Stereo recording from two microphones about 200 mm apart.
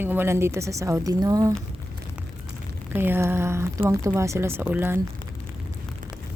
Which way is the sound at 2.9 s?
10° right (ahead or behind).